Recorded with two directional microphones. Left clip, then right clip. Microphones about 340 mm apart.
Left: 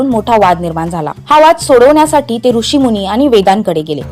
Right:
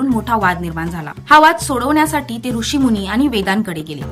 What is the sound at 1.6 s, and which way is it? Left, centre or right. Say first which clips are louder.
A woman's voice: left 10 dB; centre.